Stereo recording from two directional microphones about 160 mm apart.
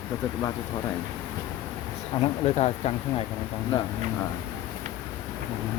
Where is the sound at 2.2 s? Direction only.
40° left (ahead or behind).